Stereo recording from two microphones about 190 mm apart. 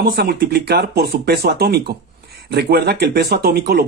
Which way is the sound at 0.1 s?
55° right (ahead or behind).